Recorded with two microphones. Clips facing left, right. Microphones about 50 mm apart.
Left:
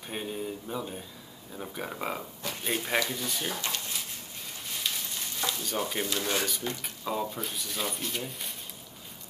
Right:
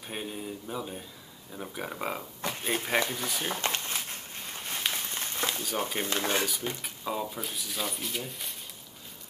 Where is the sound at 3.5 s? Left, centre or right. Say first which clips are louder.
Right 2 dB; right.